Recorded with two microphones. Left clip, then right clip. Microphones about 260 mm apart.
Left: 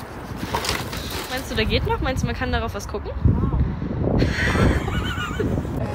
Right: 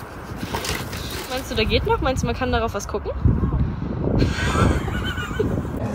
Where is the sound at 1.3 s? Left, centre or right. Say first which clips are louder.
Right 2 dB; centre.